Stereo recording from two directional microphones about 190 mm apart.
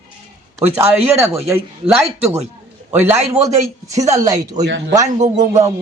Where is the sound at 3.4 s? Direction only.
15° right (ahead or behind).